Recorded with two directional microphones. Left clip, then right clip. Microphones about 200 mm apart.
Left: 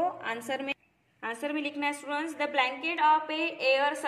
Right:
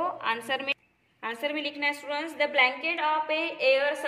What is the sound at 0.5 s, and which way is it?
A woman's voice, 30° left (ahead or behind).